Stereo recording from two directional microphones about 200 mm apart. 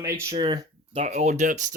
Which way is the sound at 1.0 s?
35° right (ahead or behind).